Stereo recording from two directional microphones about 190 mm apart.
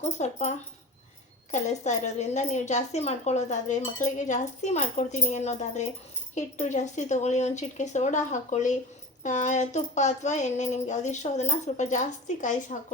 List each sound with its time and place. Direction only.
0.2 s speech: 35° left (ahead or behind)